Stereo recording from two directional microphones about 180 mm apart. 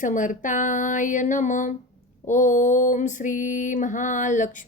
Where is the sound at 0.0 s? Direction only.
45° left (ahead or behind).